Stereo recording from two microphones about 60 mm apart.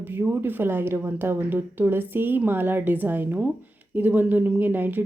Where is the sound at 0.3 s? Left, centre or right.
Right.